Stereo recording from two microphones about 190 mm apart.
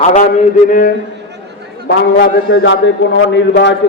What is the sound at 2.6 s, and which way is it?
A man's voice, 70° left (ahead or behind).